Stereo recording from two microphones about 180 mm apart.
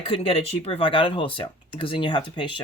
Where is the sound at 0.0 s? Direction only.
30° left (ahead or behind).